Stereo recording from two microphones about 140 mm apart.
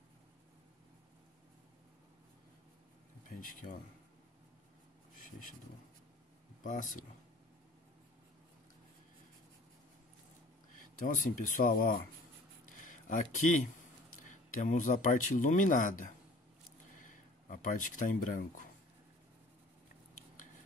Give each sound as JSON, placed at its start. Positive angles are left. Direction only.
{"t": 3.3, "sound": "speech", "side_deg": 80}
{"t": 6.6, "sound": "speech", "side_deg": 70}
{"t": 10.8, "sound": "speech", "side_deg": 70}
{"t": 12.6, "sound": "a sound", "side_deg": 70}
{"t": 14.2, "sound": "speech", "side_deg": 65}